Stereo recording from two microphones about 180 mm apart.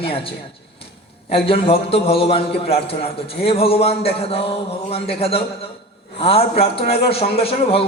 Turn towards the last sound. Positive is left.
turn(degrees=30)  # may be behind; listen again after turning